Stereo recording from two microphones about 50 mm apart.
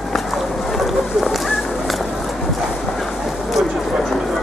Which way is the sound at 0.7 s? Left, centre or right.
Centre.